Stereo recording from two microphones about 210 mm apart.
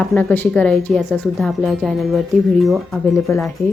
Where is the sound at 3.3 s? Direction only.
10° left (ahead or behind).